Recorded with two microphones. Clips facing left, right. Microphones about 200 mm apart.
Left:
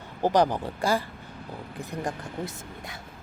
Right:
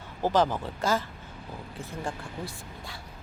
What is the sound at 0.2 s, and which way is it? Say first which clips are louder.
Speech: left 2 dB; 15° left (ahead or behind).